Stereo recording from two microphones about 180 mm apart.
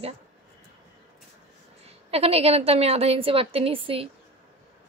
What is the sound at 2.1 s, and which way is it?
Speech, 35° right (ahead or behind).